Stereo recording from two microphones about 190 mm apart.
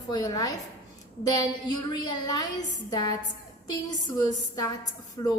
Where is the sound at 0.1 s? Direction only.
20° left (ahead or behind).